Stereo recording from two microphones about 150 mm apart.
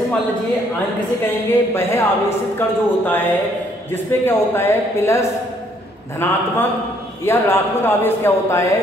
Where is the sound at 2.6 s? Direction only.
15° left (ahead or behind).